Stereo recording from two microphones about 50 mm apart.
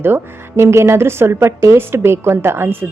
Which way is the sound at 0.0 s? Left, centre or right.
Right.